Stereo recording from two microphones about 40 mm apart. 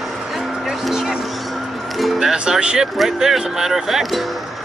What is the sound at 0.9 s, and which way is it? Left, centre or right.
Music, centre.